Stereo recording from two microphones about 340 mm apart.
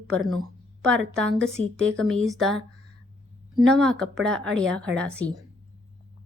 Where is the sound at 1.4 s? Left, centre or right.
Right.